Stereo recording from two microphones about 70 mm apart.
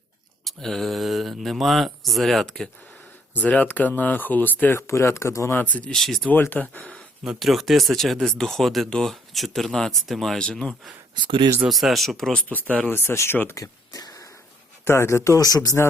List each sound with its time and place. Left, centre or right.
0.4 s speech: centre
3.4 s speech: left
4.8 s speech: left
5.5 s speech: left
5.9 s speech: centre
6.5 s speech: left
7.3 s speech: centre
11.7 s speech: centre
12.5 s speech: left
12.9 s speech: left
13.6 s a sound: left
14.8 s speech: left
15.4 s speech: left